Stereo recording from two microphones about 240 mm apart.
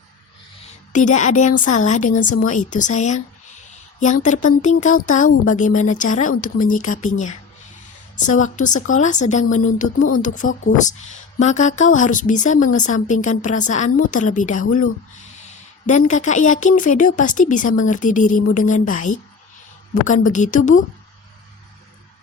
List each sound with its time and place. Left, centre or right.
0.9 s a woman's voice: left
8.4 s a woman's voice: left
15.9 s a woman's voice: left